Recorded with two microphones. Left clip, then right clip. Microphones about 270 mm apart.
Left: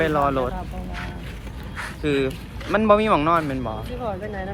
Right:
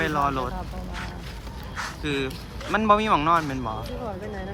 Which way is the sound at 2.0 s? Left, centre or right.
Centre.